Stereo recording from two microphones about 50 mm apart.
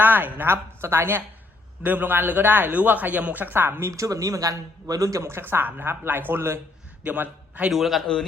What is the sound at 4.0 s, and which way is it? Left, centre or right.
Speech, right.